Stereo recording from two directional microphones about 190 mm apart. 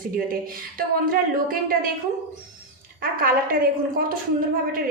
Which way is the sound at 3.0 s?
50° right (ahead or behind).